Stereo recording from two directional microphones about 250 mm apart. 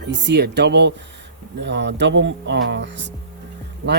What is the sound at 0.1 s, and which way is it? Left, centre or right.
Speech, right.